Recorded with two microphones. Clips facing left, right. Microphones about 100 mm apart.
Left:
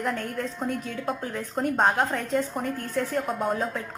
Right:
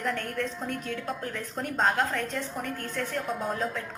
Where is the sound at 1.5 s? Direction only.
45° left (ahead or behind).